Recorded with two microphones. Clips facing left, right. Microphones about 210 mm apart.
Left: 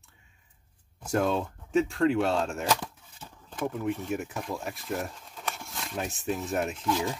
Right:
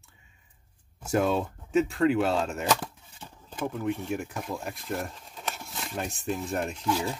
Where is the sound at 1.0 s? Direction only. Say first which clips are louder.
Right 1 dB; 5° right (ahead or behind).